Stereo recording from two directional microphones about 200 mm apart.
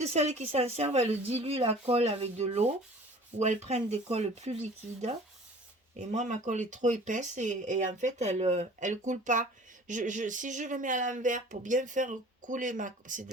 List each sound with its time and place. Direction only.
0.0 s speech: 35° right (ahead or behind)